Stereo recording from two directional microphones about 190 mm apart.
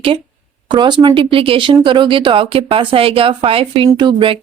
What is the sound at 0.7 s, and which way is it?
Speech, 25° right (ahead or behind).